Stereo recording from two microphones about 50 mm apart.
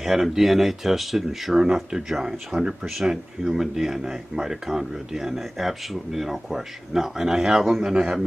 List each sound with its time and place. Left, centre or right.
0.0 s speech: centre